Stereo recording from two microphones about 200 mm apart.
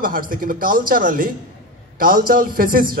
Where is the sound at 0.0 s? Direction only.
45° right (ahead or behind).